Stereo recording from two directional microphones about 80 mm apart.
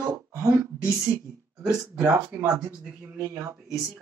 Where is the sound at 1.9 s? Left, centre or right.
Right.